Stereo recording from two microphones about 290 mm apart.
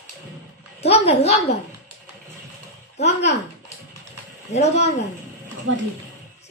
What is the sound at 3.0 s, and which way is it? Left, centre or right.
Speech, left.